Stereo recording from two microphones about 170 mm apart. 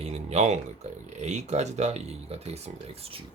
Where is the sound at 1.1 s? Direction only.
40° right (ahead or behind).